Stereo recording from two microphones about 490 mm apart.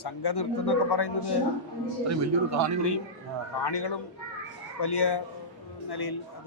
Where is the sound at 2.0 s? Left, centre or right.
Right.